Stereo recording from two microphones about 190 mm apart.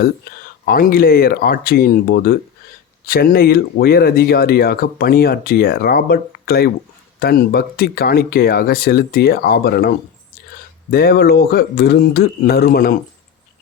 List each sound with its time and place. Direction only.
0.0 s speech: 55° left (ahead or behind)